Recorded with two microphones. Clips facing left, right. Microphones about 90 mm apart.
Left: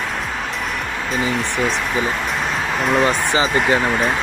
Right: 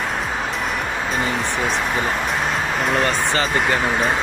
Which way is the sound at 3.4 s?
Centre (ahead or behind).